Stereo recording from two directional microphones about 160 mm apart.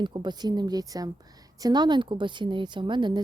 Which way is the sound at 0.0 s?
30° right (ahead or behind).